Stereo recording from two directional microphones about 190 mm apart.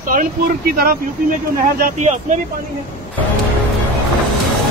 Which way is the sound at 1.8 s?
40° right (ahead or behind).